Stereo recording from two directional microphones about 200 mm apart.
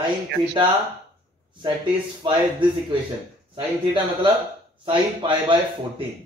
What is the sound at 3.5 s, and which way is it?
Speech, 25° right (ahead or behind).